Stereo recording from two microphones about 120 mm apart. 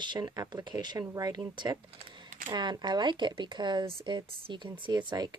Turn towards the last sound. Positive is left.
turn(degrees=-35)  # may be behind; listen again after turning